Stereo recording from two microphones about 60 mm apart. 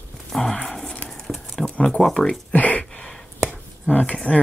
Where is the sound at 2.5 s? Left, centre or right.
Left.